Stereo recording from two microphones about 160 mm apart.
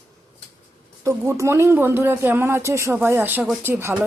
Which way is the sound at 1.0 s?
20° right (ahead or behind).